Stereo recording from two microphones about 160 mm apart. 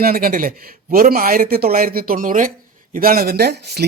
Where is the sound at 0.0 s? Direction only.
65° right (ahead or behind).